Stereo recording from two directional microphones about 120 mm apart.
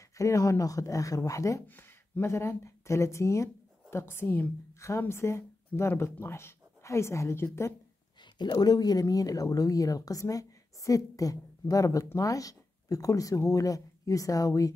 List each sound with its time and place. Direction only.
0.2 s speech: 25° left (ahead or behind)
8.4 s speech: 35° left (ahead or behind)